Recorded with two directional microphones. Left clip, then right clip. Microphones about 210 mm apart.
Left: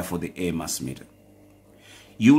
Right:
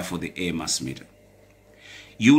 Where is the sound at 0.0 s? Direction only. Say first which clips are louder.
Even; 40° left (ahead or behind).